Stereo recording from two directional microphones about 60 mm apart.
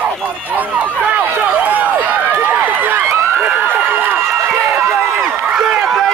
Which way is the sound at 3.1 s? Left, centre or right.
Right.